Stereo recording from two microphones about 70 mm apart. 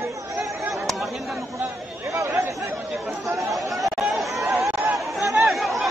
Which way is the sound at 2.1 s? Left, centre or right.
Right.